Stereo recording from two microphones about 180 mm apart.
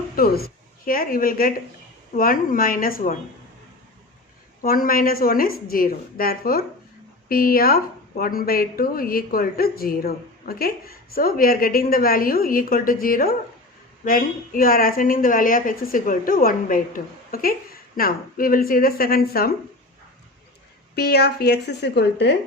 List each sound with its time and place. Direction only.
0.2 s a woman's voice: 55° left (ahead or behind)
4.6 s a woman's voice: 55° left (ahead or behind)
20.9 s a woman's voice: 60° left (ahead or behind)